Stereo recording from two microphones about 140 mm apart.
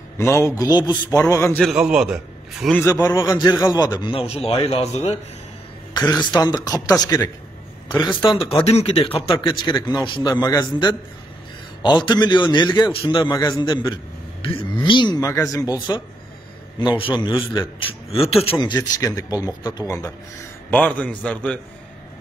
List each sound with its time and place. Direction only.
0.2 s speech: 20° left (ahead or behind)
1.6 s a man's voice: 5° right (ahead or behind)
2.7 s a man's voice: 20° left (ahead or behind); by 5.1 s 45° left (ahead or behind)
5.9 s speech: 30° left (ahead or behind)
8.2 s a man's voice: 40° left (ahead or behind)
9.3 s a man's voice: 35° left (ahead or behind)
18.6 s speech: 30° left (ahead or behind)
20.7 s a man's voice: 10° left (ahead or behind)